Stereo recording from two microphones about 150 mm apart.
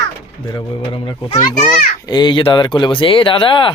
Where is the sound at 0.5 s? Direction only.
35° left (ahead or behind).